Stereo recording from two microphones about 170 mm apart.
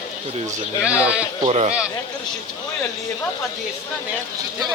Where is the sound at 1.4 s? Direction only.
40° right (ahead or behind).